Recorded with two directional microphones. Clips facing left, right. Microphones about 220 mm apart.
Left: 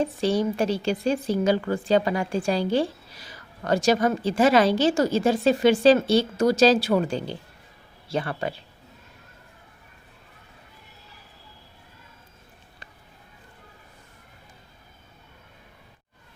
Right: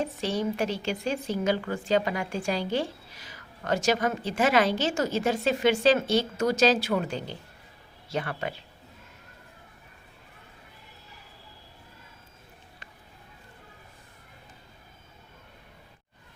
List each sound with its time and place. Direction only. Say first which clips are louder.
0.0 s a woman's voice: left 5 dB; 30° left (ahead or behind)